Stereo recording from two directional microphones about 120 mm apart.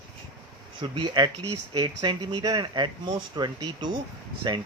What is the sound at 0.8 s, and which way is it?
Speech, 35° right (ahead or behind).